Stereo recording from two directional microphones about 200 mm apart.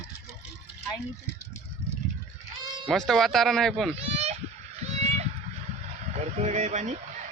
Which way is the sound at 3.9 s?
30° right (ahead or behind).